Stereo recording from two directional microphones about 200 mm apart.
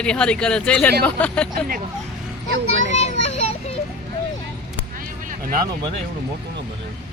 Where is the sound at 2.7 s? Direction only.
75° right (ahead or behind).